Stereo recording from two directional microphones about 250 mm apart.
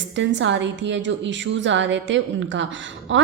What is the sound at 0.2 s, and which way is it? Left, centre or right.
A woman's voice, right.